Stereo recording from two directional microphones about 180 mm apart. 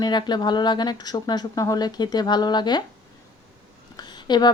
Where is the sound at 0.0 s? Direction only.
25° left (ahead or behind).